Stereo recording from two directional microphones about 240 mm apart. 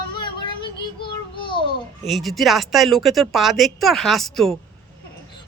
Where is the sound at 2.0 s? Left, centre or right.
Centre.